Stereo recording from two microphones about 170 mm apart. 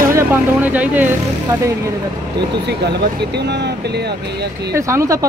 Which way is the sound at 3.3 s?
85° right.